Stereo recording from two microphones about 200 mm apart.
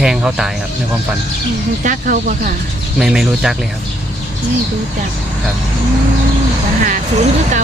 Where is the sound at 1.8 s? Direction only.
40° right (ahead or behind).